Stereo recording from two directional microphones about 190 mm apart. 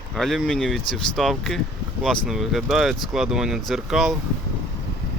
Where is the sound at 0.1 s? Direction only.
Centre (ahead or behind).